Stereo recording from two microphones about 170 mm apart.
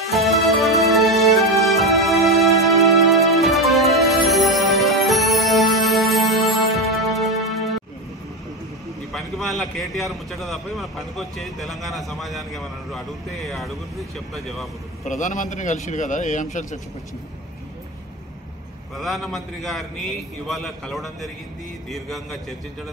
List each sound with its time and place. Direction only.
0.1 s music: centre (ahead or behind)
9.1 s a man's voice: centre (ahead or behind)
15.0 s a man's voice: 45° left (ahead or behind)
18.9 s a man's voice: centre (ahead or behind)